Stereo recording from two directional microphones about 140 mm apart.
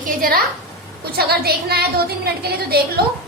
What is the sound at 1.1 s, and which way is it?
A woman's voice, 90° right.